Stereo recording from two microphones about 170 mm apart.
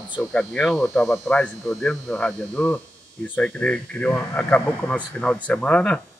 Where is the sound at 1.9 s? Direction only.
5° left (ahead or behind).